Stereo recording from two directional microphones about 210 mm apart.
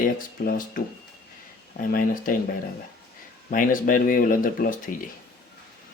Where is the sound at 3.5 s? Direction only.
40° left (ahead or behind).